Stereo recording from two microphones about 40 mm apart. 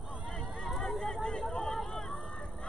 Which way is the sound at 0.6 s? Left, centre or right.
Centre.